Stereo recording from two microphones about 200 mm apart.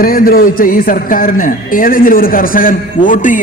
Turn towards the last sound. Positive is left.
turn(degrees=40)  # may be behind; listen again after turning